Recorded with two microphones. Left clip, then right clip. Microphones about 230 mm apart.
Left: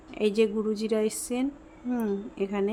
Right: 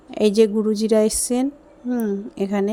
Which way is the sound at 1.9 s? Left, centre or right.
Centre.